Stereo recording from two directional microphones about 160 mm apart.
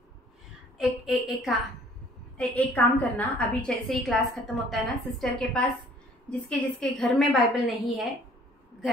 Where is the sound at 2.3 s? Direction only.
10° left (ahead or behind).